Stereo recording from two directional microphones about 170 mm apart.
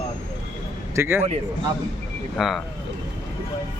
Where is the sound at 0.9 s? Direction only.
15° right (ahead or behind).